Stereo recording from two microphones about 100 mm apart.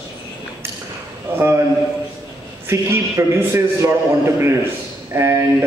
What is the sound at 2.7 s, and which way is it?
A man's voice, 25° right (ahead or behind).